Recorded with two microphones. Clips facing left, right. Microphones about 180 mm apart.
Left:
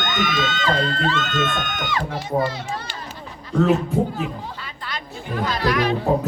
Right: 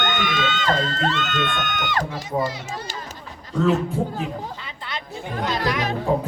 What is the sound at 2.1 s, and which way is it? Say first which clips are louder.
Speech: left 2 dB; 60° left (ahead or behind).